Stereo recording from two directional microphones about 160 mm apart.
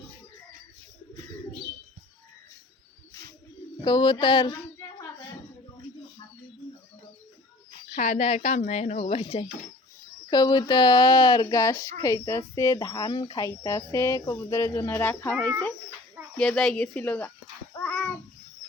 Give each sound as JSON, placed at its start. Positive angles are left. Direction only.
{"t": 3.8, "sound": "speech", "side_deg": 30}
{"t": 7.9, "sound": "speech", "side_deg": 50}
{"t": 10.2, "sound": "speech", "side_deg": 30}
{"t": 17.7, "sound": "a sound", "side_deg": 10}